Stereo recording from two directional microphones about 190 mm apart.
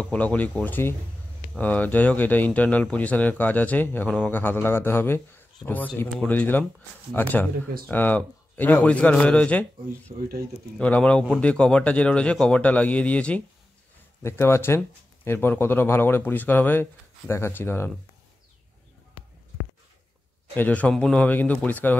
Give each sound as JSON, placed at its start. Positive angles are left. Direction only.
{"t": 0.0, "sound": "speech", "side_deg": 5}
{"t": 10.1, "sound": "speech", "side_deg": -35}
{"t": 10.8, "sound": "a man's voice", "side_deg": 5}
{"t": 20.5, "sound": "speech", "side_deg": 10}